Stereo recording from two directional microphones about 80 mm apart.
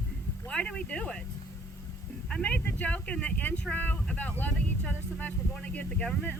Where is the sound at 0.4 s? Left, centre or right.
Centre.